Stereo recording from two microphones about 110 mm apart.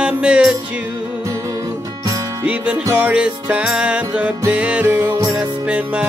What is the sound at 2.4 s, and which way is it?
Music, 10° right (ahead or behind).